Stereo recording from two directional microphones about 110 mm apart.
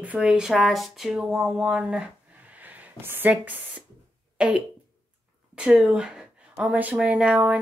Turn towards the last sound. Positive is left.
turn(degrees=-10)  # may be behind; listen again after turning